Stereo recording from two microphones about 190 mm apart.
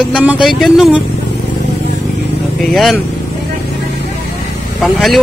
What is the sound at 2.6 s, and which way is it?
Speech, centre (ahead or behind).